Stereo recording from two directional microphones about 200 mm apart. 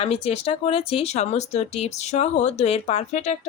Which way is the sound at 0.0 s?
30° left (ahead or behind).